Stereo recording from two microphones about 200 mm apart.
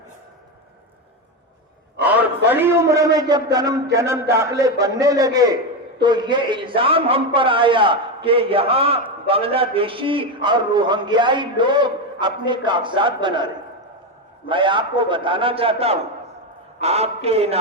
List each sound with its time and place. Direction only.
2.5 s a man's voice: 10° right (ahead or behind); by 17.6 s 30° right (ahead or behind)